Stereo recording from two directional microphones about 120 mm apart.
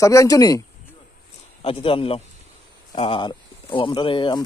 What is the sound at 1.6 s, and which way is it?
Speech, 50° left (ahead or behind).